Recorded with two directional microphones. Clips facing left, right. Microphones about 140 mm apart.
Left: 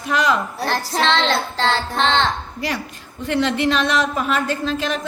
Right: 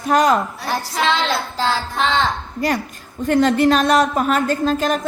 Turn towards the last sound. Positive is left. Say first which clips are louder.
# right 4 dB
turn(degrees=-45)  # may be behind; listen again after turning